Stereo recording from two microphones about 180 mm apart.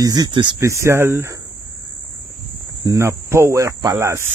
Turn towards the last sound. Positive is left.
turn(degrees=-15)  # may be behind; listen again after turning